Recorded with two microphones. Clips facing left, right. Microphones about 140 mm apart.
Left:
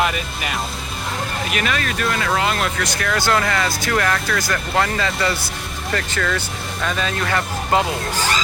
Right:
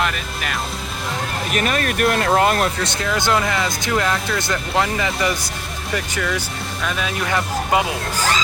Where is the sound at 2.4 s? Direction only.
45° right (ahead or behind).